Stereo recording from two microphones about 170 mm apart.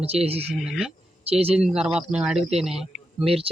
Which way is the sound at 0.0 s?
35° right (ahead or behind).